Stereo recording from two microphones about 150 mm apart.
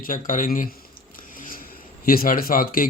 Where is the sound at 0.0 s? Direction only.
60° left (ahead or behind).